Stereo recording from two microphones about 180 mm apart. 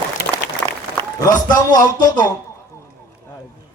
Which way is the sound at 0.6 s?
5° left (ahead or behind).